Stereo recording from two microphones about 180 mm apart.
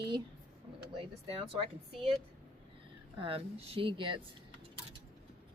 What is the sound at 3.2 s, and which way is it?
Speech, 30° right (ahead or behind).